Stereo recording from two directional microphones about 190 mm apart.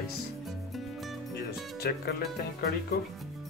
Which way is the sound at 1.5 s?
55° left (ahead or behind).